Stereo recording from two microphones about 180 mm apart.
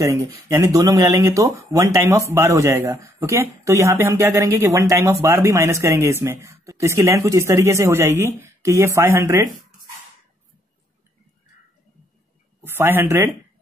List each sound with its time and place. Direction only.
0.0 s speech: 15° right (ahead or behind)
12.6 s speech: 10° right (ahead or behind)